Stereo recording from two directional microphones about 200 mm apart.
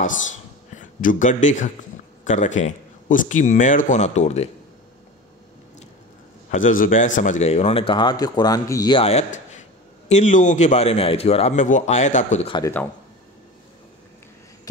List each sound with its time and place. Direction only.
0.7 s a man's voice: 40° left (ahead or behind)
6.5 s a man's voice: 40° left (ahead or behind)
12.5 s speech: 15° left (ahead or behind)